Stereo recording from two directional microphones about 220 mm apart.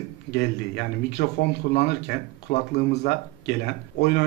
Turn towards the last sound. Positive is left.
turn(degrees=45)  # may be behind; listen again after turning